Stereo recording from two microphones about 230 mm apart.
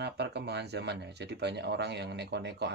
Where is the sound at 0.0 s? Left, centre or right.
Right.